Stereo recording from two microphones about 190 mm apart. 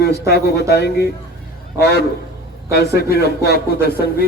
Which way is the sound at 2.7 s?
55° left (ahead or behind).